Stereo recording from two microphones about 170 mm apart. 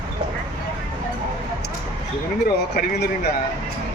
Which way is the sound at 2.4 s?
70° left (ahead or behind).